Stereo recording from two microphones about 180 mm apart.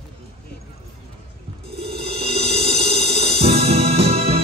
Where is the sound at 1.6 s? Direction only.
30° right (ahead or behind).